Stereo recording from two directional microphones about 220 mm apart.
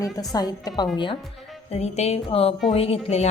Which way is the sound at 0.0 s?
15° left (ahead or behind).